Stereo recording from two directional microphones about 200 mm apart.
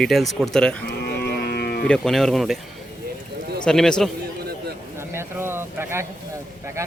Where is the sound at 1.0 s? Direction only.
50° left (ahead or behind).